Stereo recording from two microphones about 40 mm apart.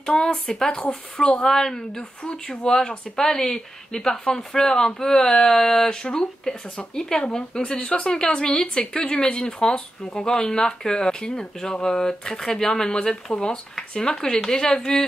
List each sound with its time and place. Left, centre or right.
0.1 s speech: left
1.2 s speech: centre
5.9 s speech: left